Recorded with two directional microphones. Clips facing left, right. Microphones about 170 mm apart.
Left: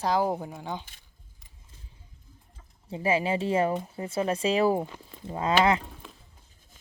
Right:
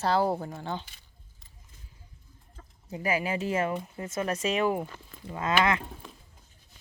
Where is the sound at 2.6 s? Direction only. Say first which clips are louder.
Right 6 dB; 55° right (ahead or behind).